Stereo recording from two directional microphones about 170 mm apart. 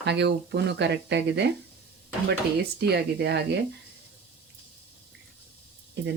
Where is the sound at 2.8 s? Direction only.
75° right (ahead or behind).